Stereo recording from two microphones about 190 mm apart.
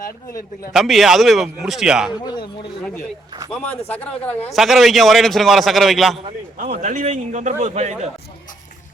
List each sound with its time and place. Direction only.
0.0 s a man's voice: 50° left (ahead or behind)
0.7 s a man's voice: centre (ahead or behind)
2.2 s speech: 25° left (ahead or behind)
3.5 s speech: 5° left (ahead or behind)
4.5 s a man's voice: centre (ahead or behind)
6.6 s a man's voice: 40° right (ahead or behind)